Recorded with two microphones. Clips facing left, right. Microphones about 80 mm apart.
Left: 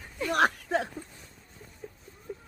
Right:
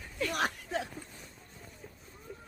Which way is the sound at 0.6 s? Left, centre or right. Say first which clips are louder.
Left 6 dB; left.